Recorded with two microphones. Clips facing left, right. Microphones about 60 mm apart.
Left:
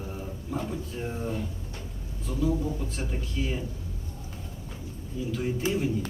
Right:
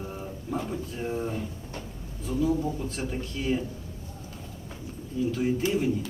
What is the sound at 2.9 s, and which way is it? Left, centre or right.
Speech, centre.